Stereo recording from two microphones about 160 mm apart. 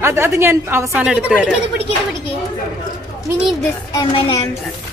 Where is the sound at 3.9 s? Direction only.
30° left (ahead or behind).